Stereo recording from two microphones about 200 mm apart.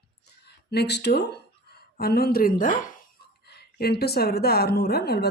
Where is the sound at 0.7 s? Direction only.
55° left (ahead or behind).